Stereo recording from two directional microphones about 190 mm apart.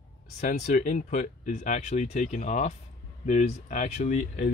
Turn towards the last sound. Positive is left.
turn(degrees=40)  # may be behind; listen again after turning